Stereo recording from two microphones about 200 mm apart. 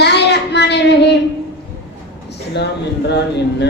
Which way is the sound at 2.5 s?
55° left (ahead or behind).